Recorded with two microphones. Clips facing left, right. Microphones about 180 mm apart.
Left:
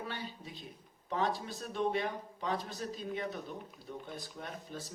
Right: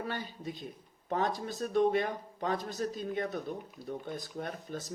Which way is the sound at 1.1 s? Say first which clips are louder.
Right 2 dB; 45° right (ahead or behind).